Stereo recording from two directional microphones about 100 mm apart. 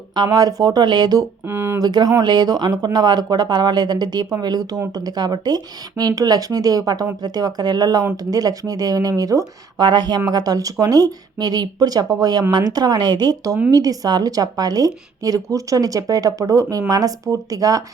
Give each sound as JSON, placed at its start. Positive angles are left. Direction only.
{"t": 0.2, "sound": "speech", "side_deg": -40}
{"t": 1.5, "sound": "a sound", "side_deg": -25}
{"t": 1.8, "sound": "speech", "side_deg": -45}
{"t": 9.7, "sound": "speech", "side_deg": -50}